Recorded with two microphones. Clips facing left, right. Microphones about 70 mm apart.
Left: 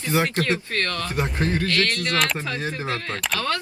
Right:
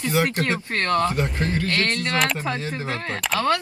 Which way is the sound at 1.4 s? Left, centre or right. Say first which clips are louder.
Left 4 dB; left.